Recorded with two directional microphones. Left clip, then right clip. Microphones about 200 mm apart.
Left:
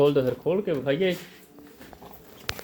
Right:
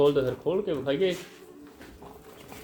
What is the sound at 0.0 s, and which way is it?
Speech, 45° left (ahead or behind).